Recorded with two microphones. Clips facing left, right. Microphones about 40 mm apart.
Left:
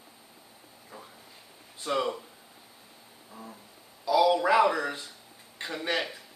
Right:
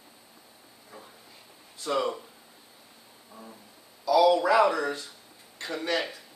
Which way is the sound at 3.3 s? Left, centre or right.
Centre.